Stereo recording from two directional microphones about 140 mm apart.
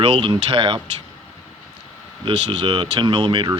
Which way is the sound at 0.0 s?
40° right (ahead or behind).